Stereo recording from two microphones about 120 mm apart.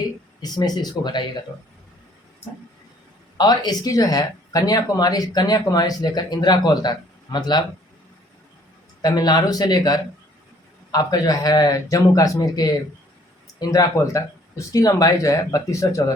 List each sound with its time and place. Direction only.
0.0 s speech: 35° left (ahead or behind)
3.3 s speech: 35° left (ahead or behind)
9.0 s speech: 35° left (ahead or behind)